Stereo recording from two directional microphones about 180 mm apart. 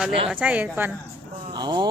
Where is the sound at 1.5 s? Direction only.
25° right (ahead or behind).